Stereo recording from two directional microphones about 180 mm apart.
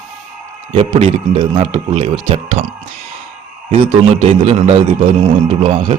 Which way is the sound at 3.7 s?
30° right (ahead or behind).